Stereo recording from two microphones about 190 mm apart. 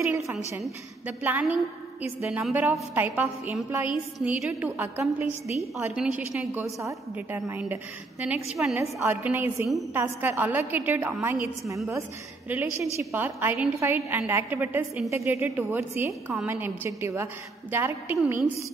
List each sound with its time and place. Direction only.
1.0 s a woman's voice: 10° right (ahead or behind)